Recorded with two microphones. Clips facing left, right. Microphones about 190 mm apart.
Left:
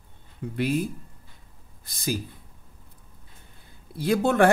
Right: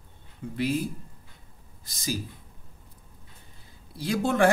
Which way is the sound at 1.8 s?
55° left (ahead or behind).